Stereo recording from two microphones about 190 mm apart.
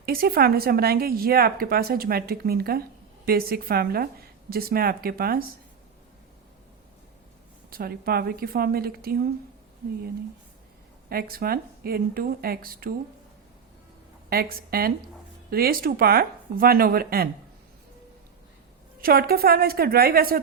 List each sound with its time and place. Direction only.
0.0 s speech: 55° right (ahead or behind)
7.7 s speech: 50° right (ahead or behind)
11.1 s speech: 50° right (ahead or behind)
14.3 s speech: 50° right (ahead or behind)
19.0 s speech: 50° right (ahead or behind)